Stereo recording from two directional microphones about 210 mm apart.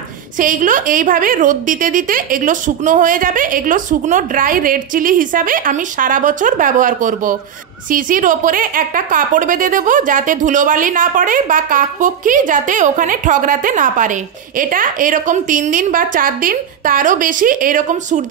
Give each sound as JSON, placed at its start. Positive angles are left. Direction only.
{"t": 0.4, "sound": "a woman's voice", "side_deg": -40}